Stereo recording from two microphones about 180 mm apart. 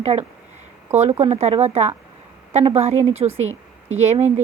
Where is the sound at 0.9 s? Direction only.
40° right (ahead or behind).